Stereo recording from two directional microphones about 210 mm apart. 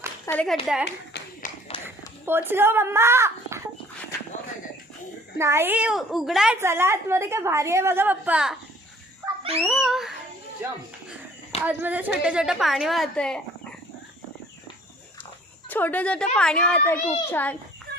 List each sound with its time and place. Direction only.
0.3 s a child's voice: 5° left (ahead or behind)
1.4 s run: 30° left (ahead or behind)
2.2 s a woman's voice: 10° right (ahead or behind)
5.4 s a woman's voice: 10° right (ahead or behind)
9.2 s dog: 25° right (ahead or behind)
9.6 s a woman's voice: centre (ahead or behind)
15.7 s a woman's voice: 10° left (ahead or behind)